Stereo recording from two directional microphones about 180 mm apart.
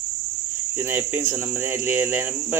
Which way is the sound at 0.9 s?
10° right (ahead or behind).